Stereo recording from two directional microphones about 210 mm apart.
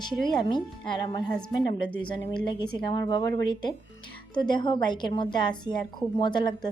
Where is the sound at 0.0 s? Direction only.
20° left (ahead or behind).